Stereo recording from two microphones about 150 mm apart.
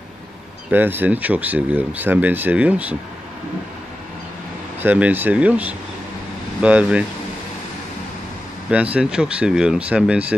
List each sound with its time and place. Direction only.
0.7 s speech: 15° right (ahead or behind)
4.8 s speech: 10° right (ahead or behind)
8.9 s speech: 5° right (ahead or behind)